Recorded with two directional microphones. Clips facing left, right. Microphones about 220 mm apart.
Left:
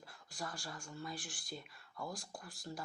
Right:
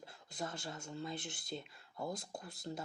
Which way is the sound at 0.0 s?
25° right (ahead or behind).